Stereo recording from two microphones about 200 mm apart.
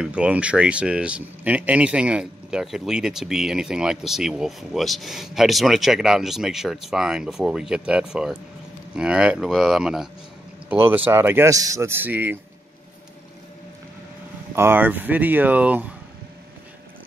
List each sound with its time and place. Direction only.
0.0 s speech: 5° right (ahead or behind)
14.5 s speech: 10° right (ahead or behind)